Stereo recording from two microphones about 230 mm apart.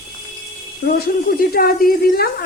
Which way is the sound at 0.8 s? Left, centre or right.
Left.